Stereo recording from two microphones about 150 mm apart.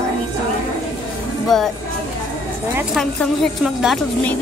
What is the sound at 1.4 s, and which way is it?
Speech, centre (ahead or behind).